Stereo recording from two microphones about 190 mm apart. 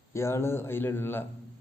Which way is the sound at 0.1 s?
15° left (ahead or behind).